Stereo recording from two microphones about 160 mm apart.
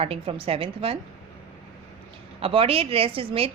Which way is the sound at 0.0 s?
35° right (ahead or behind).